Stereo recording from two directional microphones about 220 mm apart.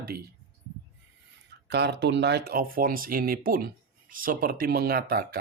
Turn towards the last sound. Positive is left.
turn(degrees=-45)  # may be behind; listen again after turning